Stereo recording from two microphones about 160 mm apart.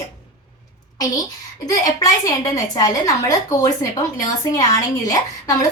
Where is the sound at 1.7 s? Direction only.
20° left (ahead or behind).